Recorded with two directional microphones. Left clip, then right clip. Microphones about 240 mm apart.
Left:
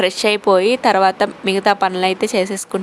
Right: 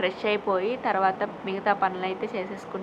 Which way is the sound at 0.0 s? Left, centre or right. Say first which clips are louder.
Left 10 dB; left.